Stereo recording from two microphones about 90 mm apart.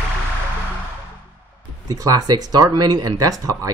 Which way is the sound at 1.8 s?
45° right (ahead or behind).